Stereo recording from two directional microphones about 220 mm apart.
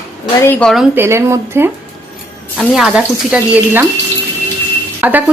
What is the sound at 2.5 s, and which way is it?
Speech, centre (ahead or behind).